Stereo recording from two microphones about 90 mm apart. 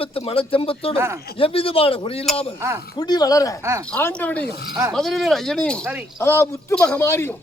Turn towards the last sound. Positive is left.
turn(degrees=25)  # may be behind; listen again after turning